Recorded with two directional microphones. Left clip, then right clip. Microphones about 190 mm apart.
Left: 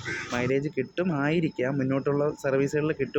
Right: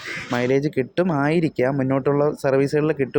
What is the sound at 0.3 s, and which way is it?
Speech, 30° right (ahead or behind).